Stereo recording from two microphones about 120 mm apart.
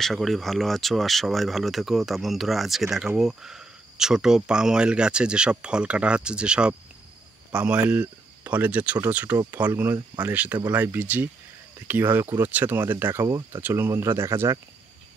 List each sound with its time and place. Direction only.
0.0 s speech: centre (ahead or behind); by 14.6 s 20° right (ahead or behind)